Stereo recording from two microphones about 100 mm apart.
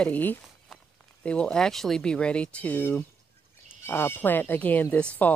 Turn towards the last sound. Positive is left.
turn(degrees=15)  # may be behind; listen again after turning